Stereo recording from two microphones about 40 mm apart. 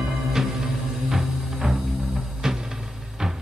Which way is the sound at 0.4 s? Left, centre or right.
Centre.